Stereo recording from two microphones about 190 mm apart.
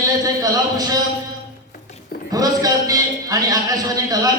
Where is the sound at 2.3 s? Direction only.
20° right (ahead or behind).